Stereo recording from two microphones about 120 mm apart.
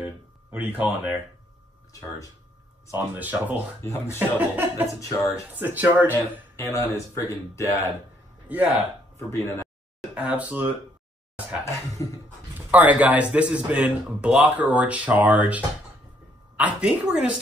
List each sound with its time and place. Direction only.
0.0 s a sound: 10° right (ahead or behind)
2.9 s speech: 15° right (ahead or behind)
3.8 s speech: 20° left (ahead or behind)
4.4 s speech: 15° right (ahead or behind)
6.5 s speech: 25° left (ahead or behind)
8.5 s speech: 10° right (ahead or behind)
9.3 s speech: 20° left (ahead or behind)
10.1 s speech: 10° right (ahead or behind)
11.6 s speech: 25° left (ahead or behind)
12.7 s speech: 15° right (ahead or behind)